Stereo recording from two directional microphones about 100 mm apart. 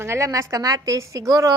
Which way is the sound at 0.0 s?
30° right (ahead or behind).